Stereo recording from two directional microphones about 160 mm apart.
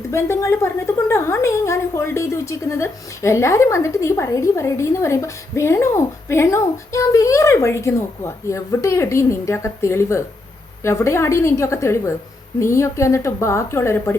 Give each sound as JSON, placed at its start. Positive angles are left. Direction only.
{"t": 0.1, "sound": "a woman's voice", "side_deg": 15}